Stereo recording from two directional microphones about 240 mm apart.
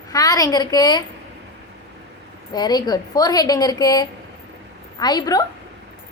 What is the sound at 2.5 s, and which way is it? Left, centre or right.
A woman's voice, centre.